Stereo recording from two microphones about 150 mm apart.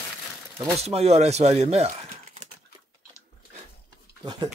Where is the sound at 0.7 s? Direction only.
45° right (ahead or behind).